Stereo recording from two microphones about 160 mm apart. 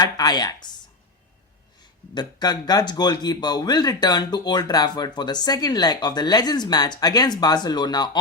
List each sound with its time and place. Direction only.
0.0 s speech: 25° left (ahead or behind)
2.1 s speech: 25° left (ahead or behind)